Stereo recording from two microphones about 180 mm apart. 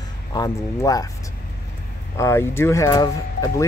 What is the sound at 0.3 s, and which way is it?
Speech, 20° left (ahead or behind).